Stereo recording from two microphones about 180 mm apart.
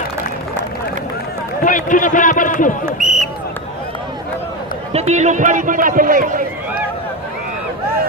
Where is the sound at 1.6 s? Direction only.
45° left (ahead or behind).